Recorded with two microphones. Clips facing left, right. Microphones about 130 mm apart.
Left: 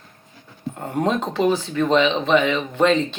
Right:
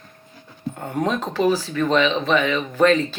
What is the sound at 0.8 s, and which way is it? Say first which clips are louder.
Speech: left 2 dB; 30° left (ahead or behind).